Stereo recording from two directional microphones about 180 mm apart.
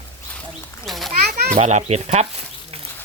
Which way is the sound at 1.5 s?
40° right (ahead or behind).